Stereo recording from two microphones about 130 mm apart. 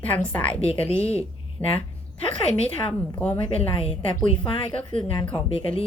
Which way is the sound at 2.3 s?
45° left (ahead or behind).